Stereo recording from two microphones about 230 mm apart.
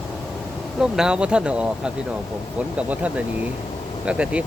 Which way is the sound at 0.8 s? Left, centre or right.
Centre.